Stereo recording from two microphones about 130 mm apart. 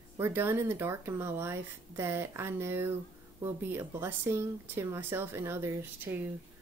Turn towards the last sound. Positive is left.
turn(degrees=-20)  # may be behind; listen again after turning